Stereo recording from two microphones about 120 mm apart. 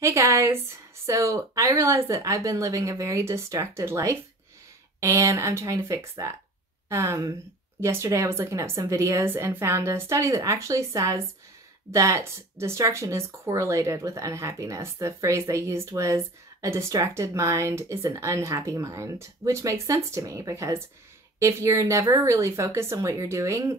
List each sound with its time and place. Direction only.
0.0 s speech: 25° right (ahead or behind)